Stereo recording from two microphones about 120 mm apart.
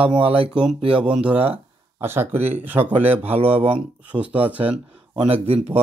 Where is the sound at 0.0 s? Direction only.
50° right (ahead or behind).